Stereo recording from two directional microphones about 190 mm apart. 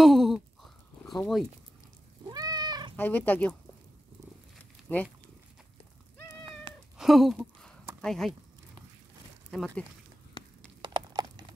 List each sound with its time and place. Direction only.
0.0 s a sound: centre (ahead or behind)
1.2 s speech: centre (ahead or behind)
2.2 s cat: 20° right (ahead or behind)
3.0 s speech: 10° left (ahead or behind)
4.9 s speech: 10° left (ahead or behind)
6.7 s cat: 25° right (ahead or behind)
7.0 s speech: centre (ahead or behind)
9.5 s speech: centre (ahead or behind)
10.4 s horse: 25° left (ahead or behind)
10.8 s a sound: 25° right (ahead or behind)